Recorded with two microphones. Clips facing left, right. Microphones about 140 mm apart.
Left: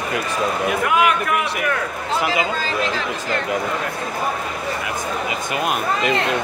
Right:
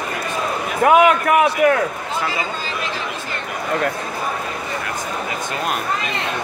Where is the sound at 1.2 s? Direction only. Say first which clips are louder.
Right 7 dB; 90° right.